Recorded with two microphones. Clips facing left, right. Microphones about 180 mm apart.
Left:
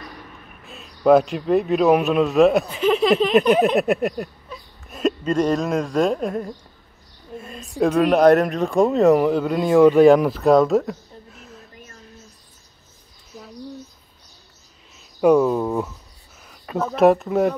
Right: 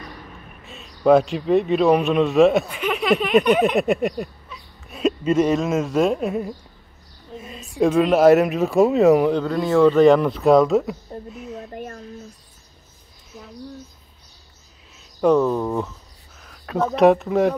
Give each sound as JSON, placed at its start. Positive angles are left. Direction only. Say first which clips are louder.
{"t": 0.7, "sound": "a man's voice", "louder": "even", "side_deg": 0}
{"t": 2.7, "sound": "speech", "louder": "left 6 dB", "side_deg": 30}
{"t": 3.6, "sound": "speech", "louder": "even", "side_deg": 0}
{"t": 9.4, "sound": "speech", "louder": "left 2 dB", "side_deg": 15}
{"t": 11.3, "sound": "a sound", "louder": "right 10 dB", "side_deg": 0}
{"t": 11.7, "sound": "a sound", "louder": "right 12 dB", "side_deg": -55}
{"t": 13.3, "sound": "bird", "louder": "left 1 dB", "side_deg": 0}
{"t": 15.1, "sound": "speech", "louder": "left 2 dB", "side_deg": 10}